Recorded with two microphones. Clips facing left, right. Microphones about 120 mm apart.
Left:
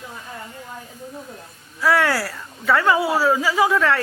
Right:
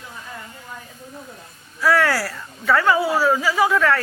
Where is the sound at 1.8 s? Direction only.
20° left (ahead or behind).